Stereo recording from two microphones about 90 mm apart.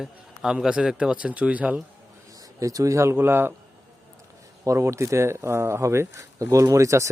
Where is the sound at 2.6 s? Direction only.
40° right (ahead or behind).